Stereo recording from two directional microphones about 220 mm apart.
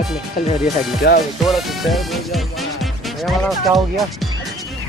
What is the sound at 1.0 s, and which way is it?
Speech, 45° left (ahead or behind).